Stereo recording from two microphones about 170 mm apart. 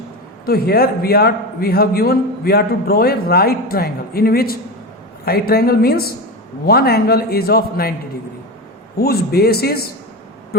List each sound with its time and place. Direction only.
0.4 s a man's voice: 65° left (ahead or behind)
9.0 s a man's voice: 65° left (ahead or behind)
10.5 s a sound: 65° left (ahead or behind)